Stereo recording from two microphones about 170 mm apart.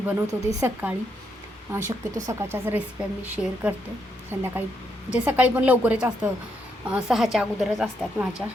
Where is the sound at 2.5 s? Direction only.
15° right (ahead or behind).